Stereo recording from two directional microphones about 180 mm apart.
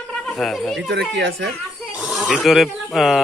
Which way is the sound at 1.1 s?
90° right.